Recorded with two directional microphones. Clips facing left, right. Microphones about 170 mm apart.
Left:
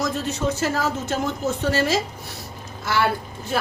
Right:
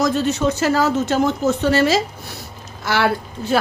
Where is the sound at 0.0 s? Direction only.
80° right.